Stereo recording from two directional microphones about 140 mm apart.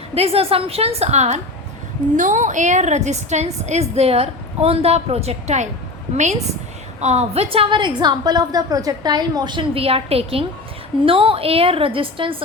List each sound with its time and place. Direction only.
0.1 s a woman's voice: 45° right (ahead or behind)
2.1 s a woman's voice: 65° right (ahead or behind)
7.0 s a woman's voice: 55° right (ahead or behind)